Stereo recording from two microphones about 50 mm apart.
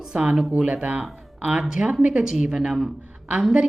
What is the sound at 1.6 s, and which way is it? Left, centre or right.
A woman's voice, centre.